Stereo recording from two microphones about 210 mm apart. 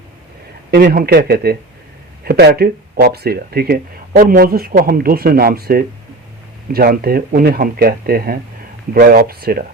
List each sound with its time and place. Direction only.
0.7 s speech: 50° right (ahead or behind)